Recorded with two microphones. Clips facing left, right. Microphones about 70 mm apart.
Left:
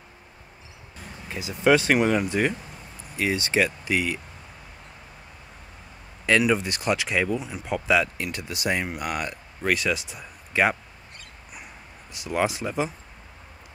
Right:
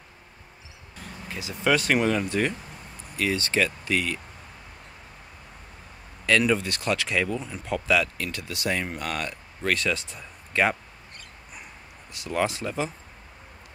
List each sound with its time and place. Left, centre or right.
1.3 s speech: centre
6.2 s speech: centre
12.1 s speech: centre